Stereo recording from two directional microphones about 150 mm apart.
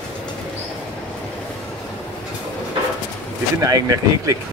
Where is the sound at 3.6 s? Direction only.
25° right (ahead or behind).